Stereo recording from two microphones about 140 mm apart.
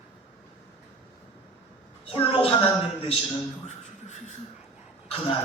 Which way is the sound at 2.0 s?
40° left (ahead or behind).